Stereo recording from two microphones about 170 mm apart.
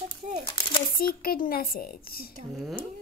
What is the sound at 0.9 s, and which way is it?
A woman's voice, 60° left (ahead or behind).